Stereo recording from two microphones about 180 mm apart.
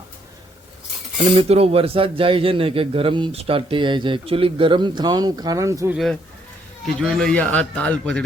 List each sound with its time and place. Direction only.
1.4 s a man's voice: 35° right (ahead or behind); by 6.0 s 15° right (ahead or behind)
7.0 s a man's voice: 5° left (ahead or behind)